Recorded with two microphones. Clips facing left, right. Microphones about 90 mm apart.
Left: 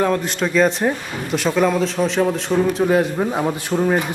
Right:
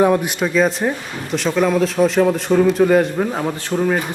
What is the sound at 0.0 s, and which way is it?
A man's voice, 15° right (ahead or behind).